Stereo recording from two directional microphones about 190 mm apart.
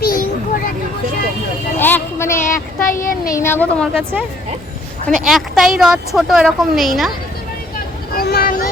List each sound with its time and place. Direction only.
0.0 s a sound: 50° left (ahead or behind)
1.8 s a sound: 10° left (ahead or behind)
2.8 s a child's voice: 45° left (ahead or behind)
3.2 s speech: 15° left (ahead or behind)
5.0 s a woman's voice: centre (ahead or behind)
8.1 s vehicle: 50° left (ahead or behind)